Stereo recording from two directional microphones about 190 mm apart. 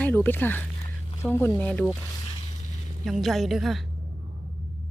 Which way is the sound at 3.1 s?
Centre (ahead or behind).